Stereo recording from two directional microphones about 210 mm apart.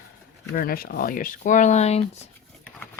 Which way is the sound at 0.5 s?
45° left (ahead or behind).